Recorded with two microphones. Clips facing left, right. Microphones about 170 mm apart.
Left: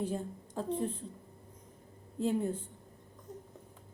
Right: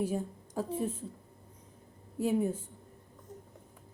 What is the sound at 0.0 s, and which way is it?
Speech, 10° right (ahead or behind).